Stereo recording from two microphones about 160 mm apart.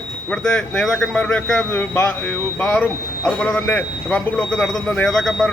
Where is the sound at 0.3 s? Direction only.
5° left (ahead or behind).